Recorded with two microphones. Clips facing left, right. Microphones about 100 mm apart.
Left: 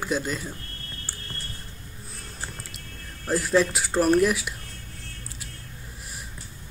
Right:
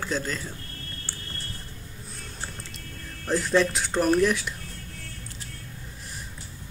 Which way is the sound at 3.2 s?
5° left (ahead or behind).